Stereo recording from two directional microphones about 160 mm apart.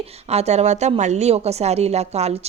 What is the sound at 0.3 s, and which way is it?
A woman's voice, 40° right (ahead or behind).